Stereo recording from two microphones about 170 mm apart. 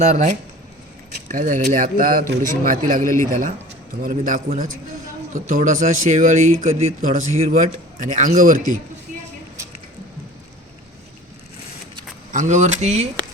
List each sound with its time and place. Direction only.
0.0 s speech: 45° right (ahead or behind)
8.1 s speech: 50° right (ahead or behind)
12.3 s speech: 45° right (ahead or behind)